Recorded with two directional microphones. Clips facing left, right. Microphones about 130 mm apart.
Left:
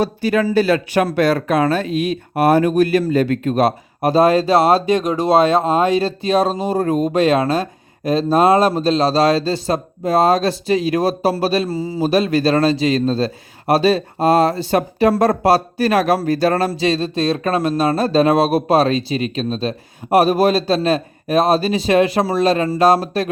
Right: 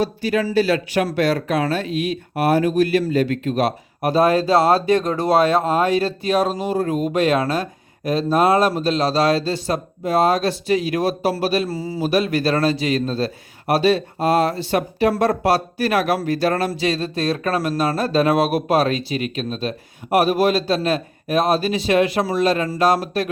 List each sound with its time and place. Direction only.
0.0 s speech: 50° left (ahead or behind); by 23.3 s 30° left (ahead or behind)